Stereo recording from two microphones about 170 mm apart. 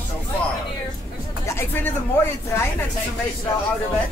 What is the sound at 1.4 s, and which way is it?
Speech, 15° left (ahead or behind).